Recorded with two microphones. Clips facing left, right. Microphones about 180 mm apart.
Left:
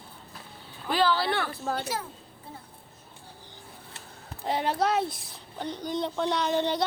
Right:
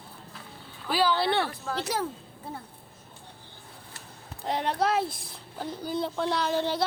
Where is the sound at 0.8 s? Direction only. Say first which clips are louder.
Left 1 dB; 10° right (ahead or behind).